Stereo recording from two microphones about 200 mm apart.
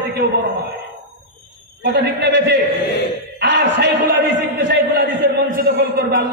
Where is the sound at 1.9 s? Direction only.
55° right (ahead or behind).